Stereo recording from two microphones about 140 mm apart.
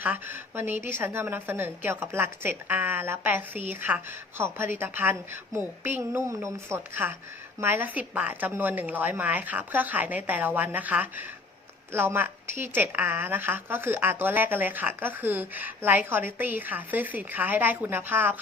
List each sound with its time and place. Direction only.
0.0 s a woman's voice: 15° right (ahead or behind)